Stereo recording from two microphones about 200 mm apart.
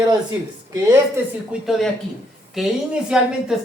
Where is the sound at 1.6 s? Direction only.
Centre (ahead or behind).